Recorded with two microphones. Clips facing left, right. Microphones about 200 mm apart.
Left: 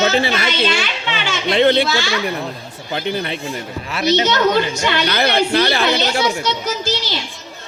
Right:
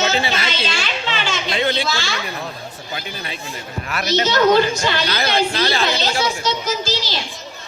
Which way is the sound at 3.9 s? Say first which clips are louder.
Left 4 dB; 20° left (ahead or behind).